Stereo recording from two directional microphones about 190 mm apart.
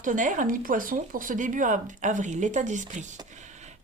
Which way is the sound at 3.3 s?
40° right (ahead or behind).